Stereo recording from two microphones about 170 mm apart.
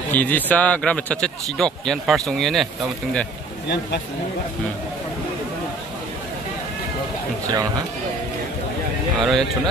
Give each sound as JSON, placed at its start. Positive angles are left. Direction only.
{"t": 0.1, "sound": "speech", "side_deg": 10}
{"t": 3.6, "sound": "speech", "side_deg": 90}
{"t": 9.2, "sound": "speech", "side_deg": 0}